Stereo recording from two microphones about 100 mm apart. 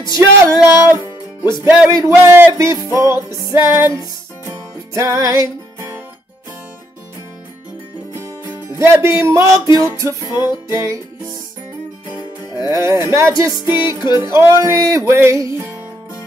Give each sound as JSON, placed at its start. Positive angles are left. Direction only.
{"t": 0.1, "sound": "music", "side_deg": -30}
{"t": 8.2, "sound": "music", "side_deg": -30}
{"t": 12.5, "sound": "music", "side_deg": -35}
{"t": 13.7, "sound": "music", "side_deg": -20}
{"t": 14.1, "sound": "music", "side_deg": -35}